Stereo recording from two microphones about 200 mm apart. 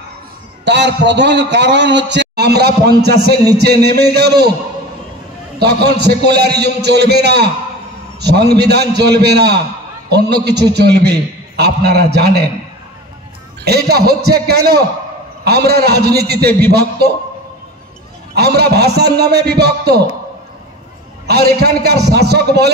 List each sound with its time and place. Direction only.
0.7 s a man's voice: 60° right (ahead or behind)
5.6 s a man's voice: 55° right (ahead or behind)
13.7 s a man's voice: 55° right (ahead or behind)
18.3 s a man's voice: 55° right (ahead or behind)
21.3 s a man's voice: 55° right (ahead or behind)